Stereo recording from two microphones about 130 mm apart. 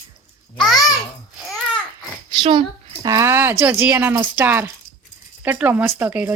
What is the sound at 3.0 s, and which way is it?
Speech, 25° right (ahead or behind).